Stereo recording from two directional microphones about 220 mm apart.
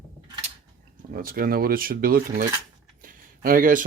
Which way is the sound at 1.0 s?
40° right (ahead or behind).